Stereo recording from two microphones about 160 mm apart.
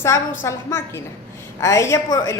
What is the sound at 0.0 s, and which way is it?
A woman's voice, 20° left (ahead or behind).